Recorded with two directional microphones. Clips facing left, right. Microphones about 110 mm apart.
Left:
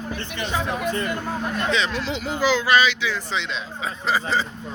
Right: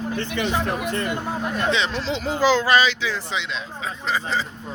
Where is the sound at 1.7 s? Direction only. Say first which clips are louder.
Right 1 dB; 25° right (ahead or behind).